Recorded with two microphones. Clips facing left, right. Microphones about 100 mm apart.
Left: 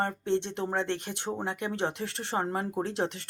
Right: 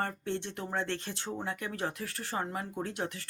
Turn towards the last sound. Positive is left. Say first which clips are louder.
# left 5 dB
turn(degrees=25)  # may be behind; listen again after turning